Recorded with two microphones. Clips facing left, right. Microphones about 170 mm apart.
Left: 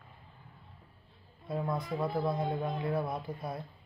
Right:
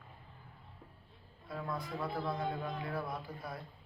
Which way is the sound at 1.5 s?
25° left (ahead or behind).